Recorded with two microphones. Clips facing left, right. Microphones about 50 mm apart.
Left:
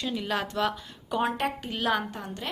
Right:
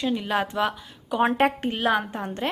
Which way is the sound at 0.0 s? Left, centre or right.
Centre.